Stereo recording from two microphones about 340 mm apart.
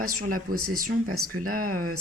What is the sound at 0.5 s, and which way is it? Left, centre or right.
Speech, right.